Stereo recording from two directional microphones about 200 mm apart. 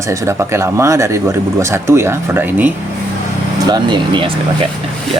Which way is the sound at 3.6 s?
20° right (ahead or behind).